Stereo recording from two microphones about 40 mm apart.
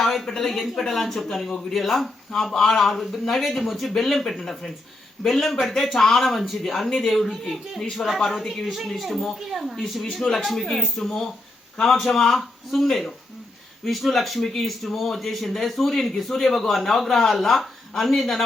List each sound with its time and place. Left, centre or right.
0.0 s a sound: centre
0.3 s speech: centre
0.5 s speech: centre
9.5 s speech: centre
9.7 s speech: centre